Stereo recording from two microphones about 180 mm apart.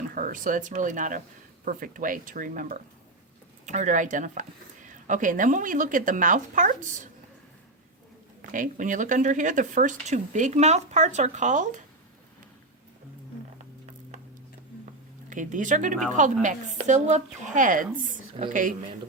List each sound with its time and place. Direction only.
0.1 s speech: 45° right (ahead or behind)
8.4 s speech: 45° right (ahead or behind)
15.3 s speech: 45° right (ahead or behind)